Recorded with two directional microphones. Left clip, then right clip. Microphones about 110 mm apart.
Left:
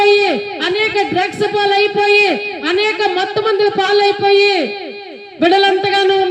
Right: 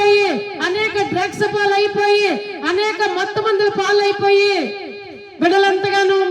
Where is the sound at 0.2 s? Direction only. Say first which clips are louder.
Left 2 dB; 5° left (ahead or behind).